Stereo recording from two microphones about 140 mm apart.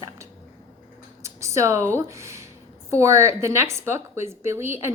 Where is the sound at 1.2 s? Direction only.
20° right (ahead or behind).